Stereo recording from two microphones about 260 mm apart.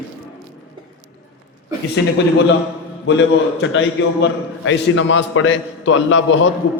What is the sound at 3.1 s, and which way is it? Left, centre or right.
A man's voice, left.